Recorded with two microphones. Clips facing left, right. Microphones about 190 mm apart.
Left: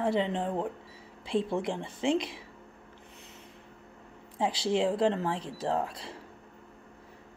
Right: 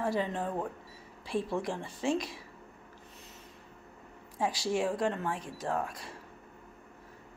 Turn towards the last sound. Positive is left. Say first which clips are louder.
# left 3 dB
turn(degrees=25)  # may be behind; listen again after turning